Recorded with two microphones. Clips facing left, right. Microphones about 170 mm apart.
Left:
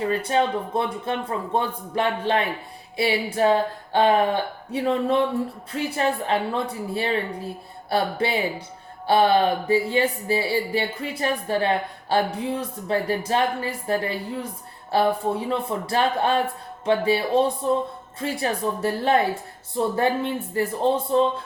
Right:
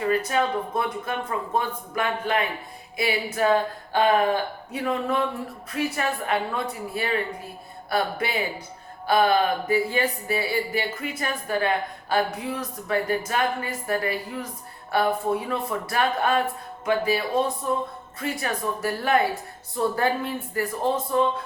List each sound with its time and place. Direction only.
0.1 s speech: 30° left (ahead or behind)